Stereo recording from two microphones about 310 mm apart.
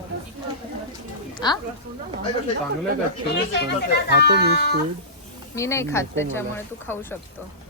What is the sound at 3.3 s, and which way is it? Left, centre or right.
Speech, left.